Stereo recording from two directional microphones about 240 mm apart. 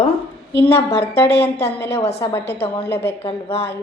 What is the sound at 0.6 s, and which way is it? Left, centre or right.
A woman's voice, centre.